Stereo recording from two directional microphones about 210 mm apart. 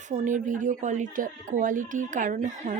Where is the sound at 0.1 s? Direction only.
35° right (ahead or behind).